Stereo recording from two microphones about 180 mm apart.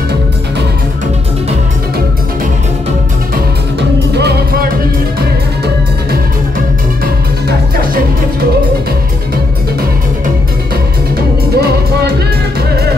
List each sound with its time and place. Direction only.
4.1 s music: 65° right (ahead or behind)
7.4 s music: 55° right (ahead or behind)
11.1 s music: 60° right (ahead or behind)